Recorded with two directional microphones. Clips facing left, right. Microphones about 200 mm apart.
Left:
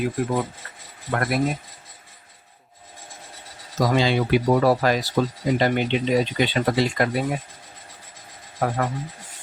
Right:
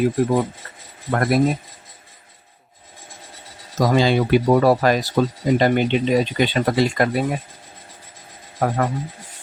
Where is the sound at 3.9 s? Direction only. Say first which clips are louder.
Right 4 dB; 45° right (ahead or behind).